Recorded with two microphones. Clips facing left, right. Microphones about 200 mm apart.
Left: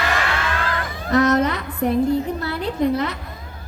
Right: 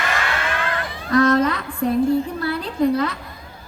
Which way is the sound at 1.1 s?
20° left (ahead or behind).